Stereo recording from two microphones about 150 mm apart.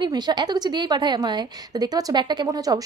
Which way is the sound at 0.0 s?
30° right (ahead or behind).